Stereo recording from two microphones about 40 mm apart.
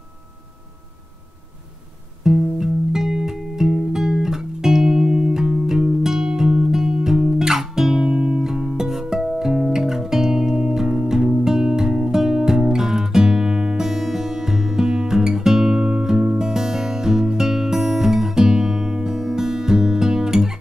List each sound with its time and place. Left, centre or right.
2.2 s music: centre
6.7 s guitar: centre
8.1 s music: right
8.4 s music: centre